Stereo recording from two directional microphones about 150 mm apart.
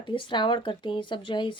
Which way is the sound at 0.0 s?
35° left (ahead or behind).